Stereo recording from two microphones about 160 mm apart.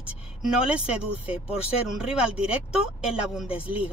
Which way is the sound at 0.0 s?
5° right (ahead or behind).